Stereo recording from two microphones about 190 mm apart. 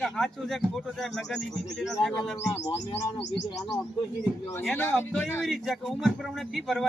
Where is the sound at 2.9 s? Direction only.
20° left (ahead or behind).